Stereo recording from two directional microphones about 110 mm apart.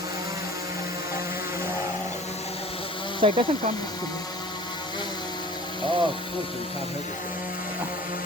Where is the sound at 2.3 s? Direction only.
75° left (ahead or behind); by 3.2 s 50° left (ahead or behind).